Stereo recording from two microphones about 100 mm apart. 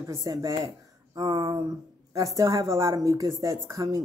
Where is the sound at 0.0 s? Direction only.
35° right (ahead or behind).